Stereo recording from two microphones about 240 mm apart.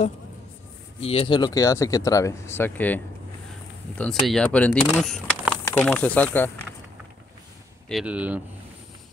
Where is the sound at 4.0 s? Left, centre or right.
Centre.